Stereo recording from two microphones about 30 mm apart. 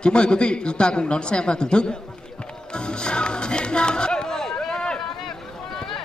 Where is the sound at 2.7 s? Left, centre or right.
Left.